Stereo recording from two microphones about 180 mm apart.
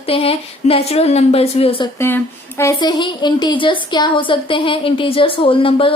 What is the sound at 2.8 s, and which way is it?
A woman's voice, 25° left (ahead or behind).